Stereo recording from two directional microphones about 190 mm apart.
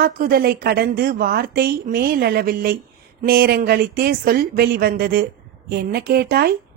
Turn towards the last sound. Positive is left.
turn(degrees=-55)  # may be behind; listen again after turning